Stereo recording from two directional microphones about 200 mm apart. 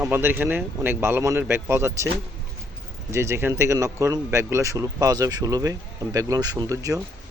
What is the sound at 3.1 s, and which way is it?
Speech, 15° right (ahead or behind).